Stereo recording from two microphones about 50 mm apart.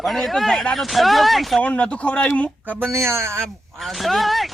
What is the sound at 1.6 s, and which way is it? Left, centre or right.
Speech, left.